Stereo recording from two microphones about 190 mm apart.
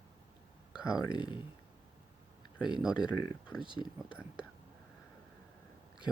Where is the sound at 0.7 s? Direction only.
5° right (ahead or behind).